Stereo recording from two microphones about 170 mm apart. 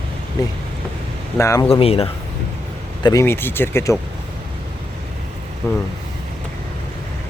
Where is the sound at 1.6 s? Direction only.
35° left (ahead or behind).